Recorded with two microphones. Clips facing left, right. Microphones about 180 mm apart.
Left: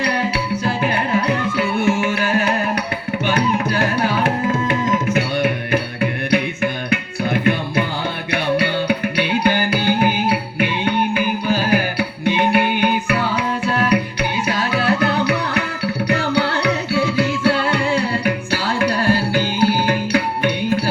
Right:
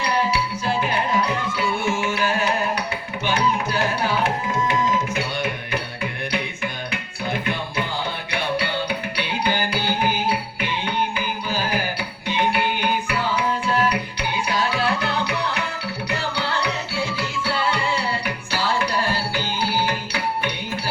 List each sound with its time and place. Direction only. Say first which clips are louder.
0.0 s music: left 2 dB; 60° left (ahead or behind)